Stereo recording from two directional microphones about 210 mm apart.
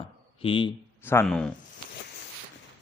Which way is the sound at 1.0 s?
10° left (ahead or behind).